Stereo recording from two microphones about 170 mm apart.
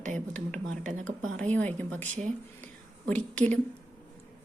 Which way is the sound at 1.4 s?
10° left (ahead or behind).